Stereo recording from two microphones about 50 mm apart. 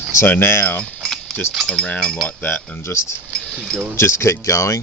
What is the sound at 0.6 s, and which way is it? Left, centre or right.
Speech, left.